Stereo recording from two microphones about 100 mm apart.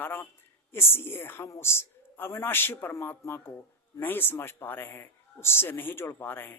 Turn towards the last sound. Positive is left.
turn(degrees=20)  # may be behind; listen again after turning